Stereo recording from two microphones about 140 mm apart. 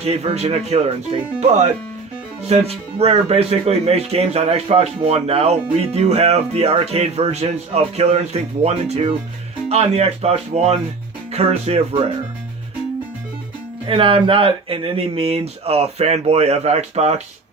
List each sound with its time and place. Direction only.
0.0 s speech: 50° right (ahead or behind)
13.8 s speech: 40° right (ahead or behind)